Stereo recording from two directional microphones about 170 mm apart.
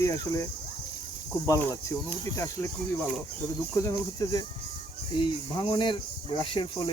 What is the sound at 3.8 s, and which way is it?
Speech, 20° left (ahead or behind).